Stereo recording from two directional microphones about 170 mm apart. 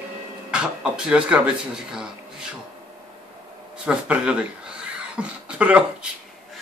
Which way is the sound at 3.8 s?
5° right (ahead or behind).